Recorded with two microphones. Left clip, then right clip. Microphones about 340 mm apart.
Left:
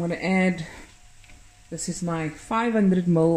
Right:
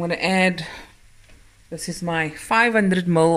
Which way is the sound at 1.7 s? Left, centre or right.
Right.